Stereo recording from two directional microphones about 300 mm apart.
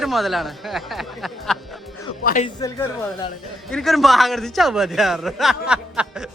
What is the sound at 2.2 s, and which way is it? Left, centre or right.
Speech, left.